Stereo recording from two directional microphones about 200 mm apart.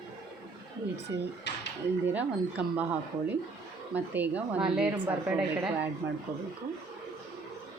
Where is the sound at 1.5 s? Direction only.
60° left (ahead or behind).